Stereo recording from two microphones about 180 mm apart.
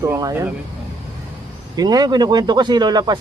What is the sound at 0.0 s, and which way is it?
Speech, 15° right (ahead or behind).